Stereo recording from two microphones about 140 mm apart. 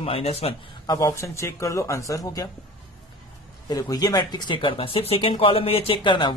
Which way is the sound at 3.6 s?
25° left (ahead or behind).